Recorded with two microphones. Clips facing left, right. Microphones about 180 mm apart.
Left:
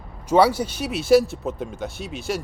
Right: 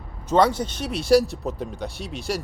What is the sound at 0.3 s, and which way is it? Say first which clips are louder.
Speech: left 2 dB; 10° left (ahead or behind).